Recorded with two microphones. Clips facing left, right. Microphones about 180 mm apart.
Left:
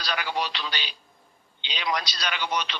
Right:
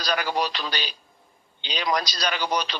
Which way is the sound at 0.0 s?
40° right (ahead or behind).